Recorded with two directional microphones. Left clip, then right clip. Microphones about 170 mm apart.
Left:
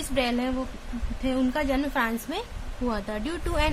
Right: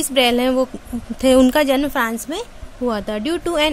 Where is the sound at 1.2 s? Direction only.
70° right (ahead or behind).